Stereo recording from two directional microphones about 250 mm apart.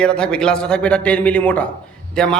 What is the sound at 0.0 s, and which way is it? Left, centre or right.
A man's voice, centre.